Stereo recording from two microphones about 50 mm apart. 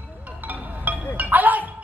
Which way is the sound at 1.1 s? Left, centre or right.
Right.